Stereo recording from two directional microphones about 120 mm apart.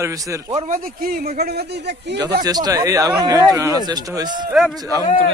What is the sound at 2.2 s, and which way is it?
Speech, 30° right (ahead or behind).